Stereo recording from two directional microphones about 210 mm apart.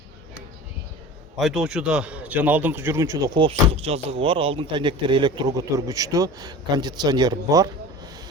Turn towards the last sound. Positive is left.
turn(degrees=-15)  # may be behind; listen again after turning